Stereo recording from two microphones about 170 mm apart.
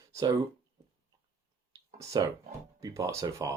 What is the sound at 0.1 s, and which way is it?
Speech, 20° right (ahead or behind).